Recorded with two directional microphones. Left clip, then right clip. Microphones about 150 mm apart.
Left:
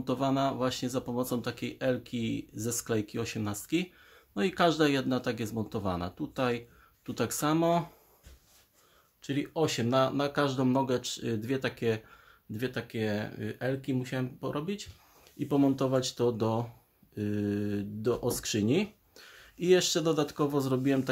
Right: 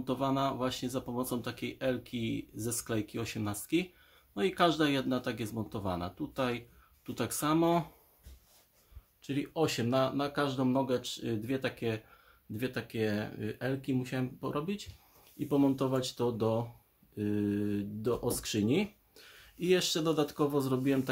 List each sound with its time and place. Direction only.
0.0 s speech: 25° left (ahead or behind)
3.7 s speech: 30° left (ahead or behind)
9.2 s speech: 25° left (ahead or behind)
9.6 s speech: 15° left (ahead or behind)
9.8 s speech: 30° left (ahead or behind)
12.5 s speech: 10° left (ahead or behind)
15.3 s speech: 25° left (ahead or behind)